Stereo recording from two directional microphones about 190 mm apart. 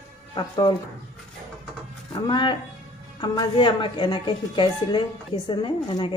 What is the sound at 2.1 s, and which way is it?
A woman's voice, 25° left (ahead or behind).